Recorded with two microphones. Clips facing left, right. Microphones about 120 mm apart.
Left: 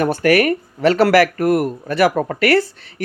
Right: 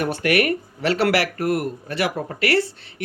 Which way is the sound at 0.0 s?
40° left (ahead or behind).